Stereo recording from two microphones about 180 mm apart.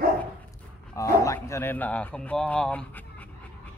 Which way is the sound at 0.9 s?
15° left (ahead or behind).